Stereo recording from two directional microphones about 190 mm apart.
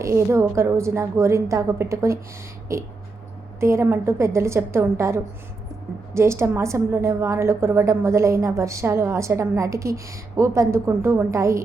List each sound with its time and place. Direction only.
0.0 s a woman's voice: 15° right (ahead or behind)